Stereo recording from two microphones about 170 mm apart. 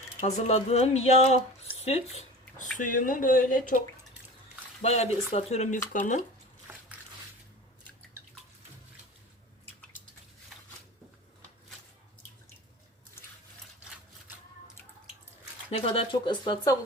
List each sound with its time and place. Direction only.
0.2 s speech: 40° left (ahead or behind)
1.8 s squish: 40° left (ahead or behind)
2.7 s speech: 50° left (ahead or behind)
4.8 s speech: 40° left (ahead or behind)
6.7 s biting: 10° right (ahead or behind)
15.7 s speech: 35° left (ahead or behind)